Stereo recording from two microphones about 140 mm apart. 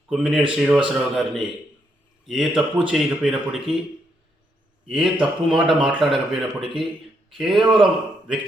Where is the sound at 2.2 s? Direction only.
5° right (ahead or behind).